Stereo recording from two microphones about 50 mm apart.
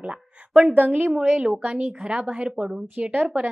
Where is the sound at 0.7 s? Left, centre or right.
Right.